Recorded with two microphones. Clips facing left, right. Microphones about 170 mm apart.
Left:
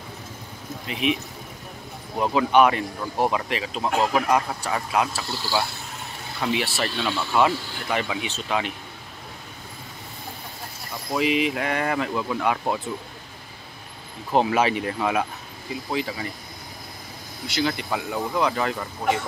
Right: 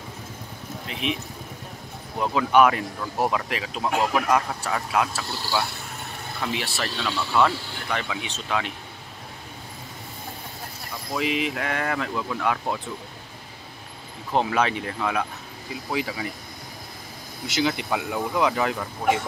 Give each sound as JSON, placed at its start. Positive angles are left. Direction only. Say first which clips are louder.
{"t": 2.1, "sound": "speech", "louder": "left 1 dB", "side_deg": 10}
{"t": 11.1, "sound": "speech", "louder": "left 3 dB", "side_deg": 0}
{"t": 14.3, "sound": "speech", "louder": "left 2 dB", "side_deg": 5}
{"t": 15.0, "sound": "speech", "louder": "left 1 dB", "side_deg": 15}
{"t": 15.9, "sound": "speech", "louder": "even", "side_deg": -5}
{"t": 17.6, "sound": "speech", "louder": "right 1 dB", "side_deg": -15}